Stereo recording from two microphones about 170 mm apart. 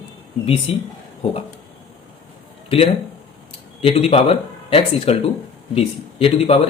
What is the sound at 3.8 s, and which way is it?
Speech, 35° left (ahead or behind).